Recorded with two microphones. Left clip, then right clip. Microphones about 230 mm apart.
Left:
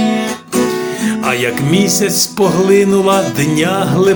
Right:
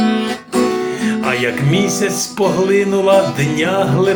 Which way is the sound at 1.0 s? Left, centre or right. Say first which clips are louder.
Left 3 dB; left.